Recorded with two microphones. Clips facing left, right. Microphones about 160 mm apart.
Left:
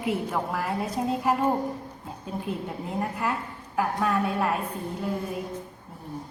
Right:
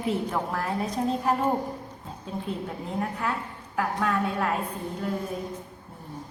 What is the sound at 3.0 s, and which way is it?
A woman's voice, 10° left (ahead or behind).